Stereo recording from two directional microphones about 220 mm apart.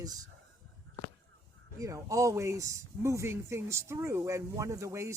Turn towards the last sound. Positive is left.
turn(degrees=-15)  # may be behind; listen again after turning